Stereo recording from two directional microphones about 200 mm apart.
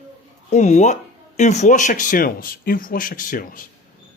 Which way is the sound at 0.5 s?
35° left (ahead or behind).